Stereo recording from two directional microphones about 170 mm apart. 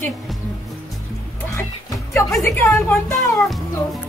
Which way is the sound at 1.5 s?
15° left (ahead or behind).